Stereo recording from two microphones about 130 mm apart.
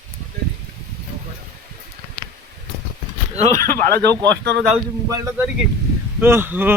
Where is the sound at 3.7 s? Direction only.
20° left (ahead or behind).